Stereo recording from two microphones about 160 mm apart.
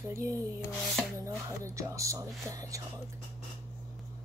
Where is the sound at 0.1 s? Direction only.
20° right (ahead or behind).